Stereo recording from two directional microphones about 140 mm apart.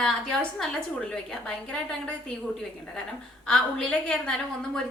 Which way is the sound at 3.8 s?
5° left (ahead or behind).